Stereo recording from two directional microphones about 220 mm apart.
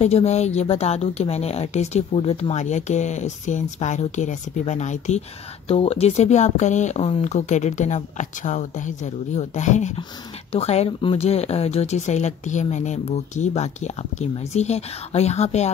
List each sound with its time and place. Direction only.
0.0 s speech: 30° left (ahead or behind)